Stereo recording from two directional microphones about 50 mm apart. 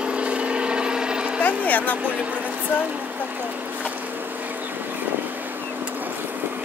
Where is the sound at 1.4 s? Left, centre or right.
Left.